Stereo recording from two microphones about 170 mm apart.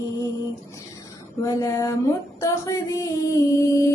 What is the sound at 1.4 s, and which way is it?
Female singing, 20° left (ahead or behind).